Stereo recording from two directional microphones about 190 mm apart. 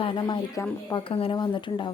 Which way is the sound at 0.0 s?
25° left (ahead or behind).